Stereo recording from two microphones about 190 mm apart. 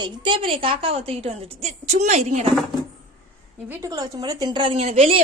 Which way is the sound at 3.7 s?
15° right (ahead or behind).